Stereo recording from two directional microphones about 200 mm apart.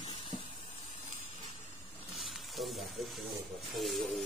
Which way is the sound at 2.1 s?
Centre (ahead or behind).